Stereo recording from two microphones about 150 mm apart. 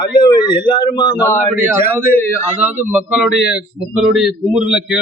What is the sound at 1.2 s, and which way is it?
A man's voice, 15° right (ahead or behind).